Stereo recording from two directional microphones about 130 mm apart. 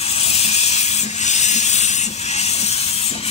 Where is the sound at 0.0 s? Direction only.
50° left (ahead or behind).